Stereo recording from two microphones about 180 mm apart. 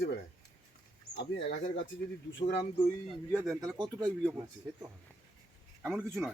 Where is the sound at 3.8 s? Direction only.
20° right (ahead or behind).